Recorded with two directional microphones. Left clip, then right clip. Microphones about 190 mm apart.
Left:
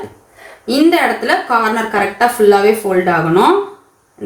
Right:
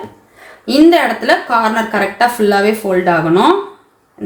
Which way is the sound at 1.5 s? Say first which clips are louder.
Right 1 dB; 40° right (ahead or behind).